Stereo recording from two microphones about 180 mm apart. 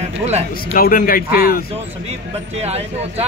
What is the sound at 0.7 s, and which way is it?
Speech, 50° left (ahead or behind).